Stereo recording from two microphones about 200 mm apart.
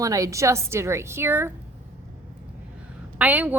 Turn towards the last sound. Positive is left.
turn(degrees=-10)  # may be behind; listen again after turning